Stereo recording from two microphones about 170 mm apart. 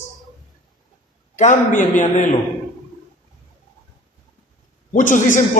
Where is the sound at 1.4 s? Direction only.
45° left (ahead or behind).